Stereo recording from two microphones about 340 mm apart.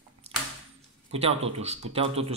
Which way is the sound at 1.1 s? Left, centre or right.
Centre.